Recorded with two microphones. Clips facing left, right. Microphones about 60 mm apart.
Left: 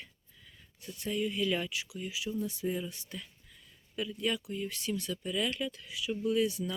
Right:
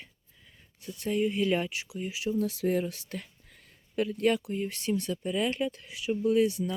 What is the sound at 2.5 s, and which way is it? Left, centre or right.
Speech, right.